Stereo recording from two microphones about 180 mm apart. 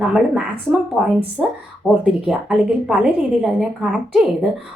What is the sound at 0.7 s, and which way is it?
Speech, 5° right (ahead or behind).